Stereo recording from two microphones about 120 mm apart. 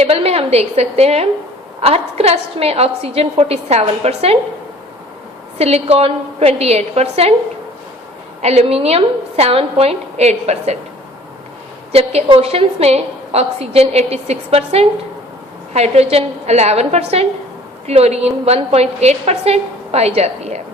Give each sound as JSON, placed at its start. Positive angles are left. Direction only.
{"t": 0.0, "sound": "a woman's voice", "side_deg": -60}
{"t": 5.5, "sound": "a woman's voice", "side_deg": -60}
{"t": 8.4, "sound": "a woman's voice", "side_deg": -60}
{"t": 11.9, "sound": "a woman's voice", "side_deg": -55}